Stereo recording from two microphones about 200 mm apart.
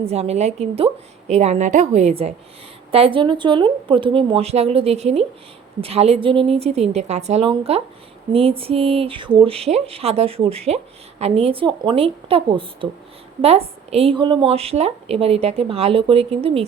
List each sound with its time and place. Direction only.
0.0 s a woman's voice: 30° right (ahead or behind)